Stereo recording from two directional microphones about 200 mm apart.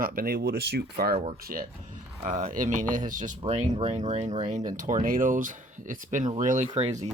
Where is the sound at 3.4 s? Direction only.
30° right (ahead or behind).